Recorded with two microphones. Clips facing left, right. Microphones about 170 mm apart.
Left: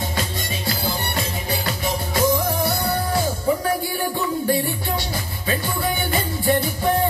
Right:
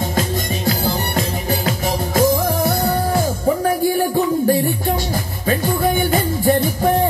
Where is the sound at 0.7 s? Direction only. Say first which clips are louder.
Right 5 dB; 45° right (ahead or behind).